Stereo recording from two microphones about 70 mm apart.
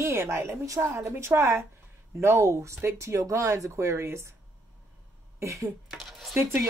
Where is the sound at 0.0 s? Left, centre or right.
Right.